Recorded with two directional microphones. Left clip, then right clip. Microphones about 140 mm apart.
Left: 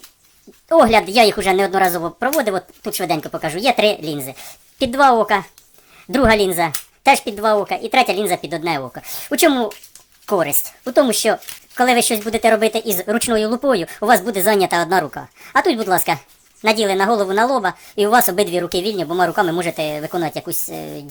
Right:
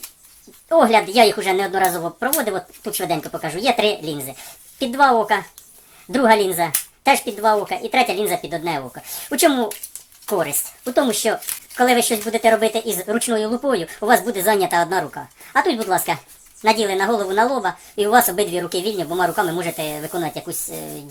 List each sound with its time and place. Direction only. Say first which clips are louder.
0.7 s speech: left 2 dB; 50° left (ahead or behind)